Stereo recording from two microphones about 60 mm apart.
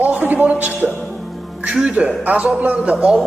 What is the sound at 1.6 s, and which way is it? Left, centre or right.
Speech, centre.